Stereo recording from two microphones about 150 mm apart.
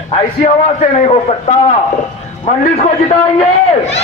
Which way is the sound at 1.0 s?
45° left (ahead or behind).